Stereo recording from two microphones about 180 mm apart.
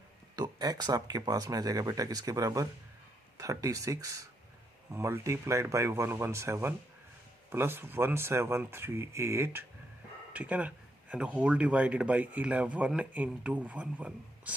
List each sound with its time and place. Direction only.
0.3 s speech: 20° right (ahead or behind)